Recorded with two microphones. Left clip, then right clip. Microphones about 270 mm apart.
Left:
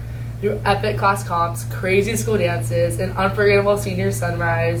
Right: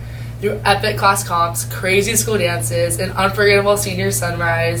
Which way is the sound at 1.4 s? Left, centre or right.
Centre.